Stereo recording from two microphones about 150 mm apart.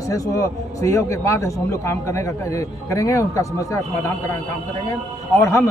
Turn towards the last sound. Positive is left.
turn(degrees=20)  # may be behind; listen again after turning